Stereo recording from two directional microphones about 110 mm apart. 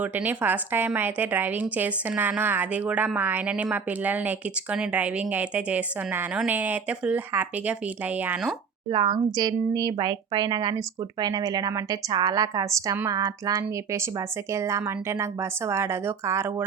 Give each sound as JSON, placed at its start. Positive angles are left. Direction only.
{"t": 0.0, "sound": "a woman's voice", "side_deg": -15}
{"t": 8.9, "sound": "speech", "side_deg": -45}